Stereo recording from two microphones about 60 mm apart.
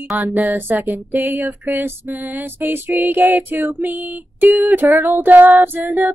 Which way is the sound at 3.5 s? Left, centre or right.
Right.